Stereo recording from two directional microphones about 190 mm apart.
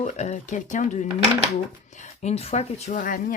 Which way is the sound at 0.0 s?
40° left (ahead or behind).